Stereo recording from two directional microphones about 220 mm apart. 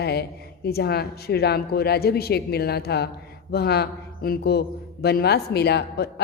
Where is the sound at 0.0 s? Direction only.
45° left (ahead or behind).